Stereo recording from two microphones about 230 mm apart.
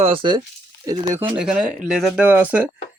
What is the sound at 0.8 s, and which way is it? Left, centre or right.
Speech, centre.